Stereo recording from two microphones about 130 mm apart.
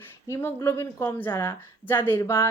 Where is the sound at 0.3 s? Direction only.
20° left (ahead or behind).